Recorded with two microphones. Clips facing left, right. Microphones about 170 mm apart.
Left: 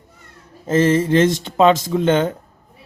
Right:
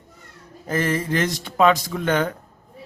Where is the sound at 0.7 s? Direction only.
25° left (ahead or behind).